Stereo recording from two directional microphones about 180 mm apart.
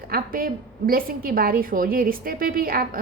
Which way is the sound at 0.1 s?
55° right (ahead or behind).